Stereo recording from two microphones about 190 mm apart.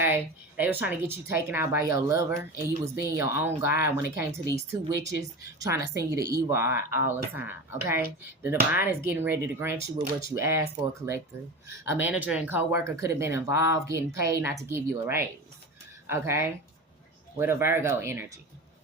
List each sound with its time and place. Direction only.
0.0 s a woman's voice: 10° right (ahead or behind)
5.4 s speech: 15° right (ahead or behind)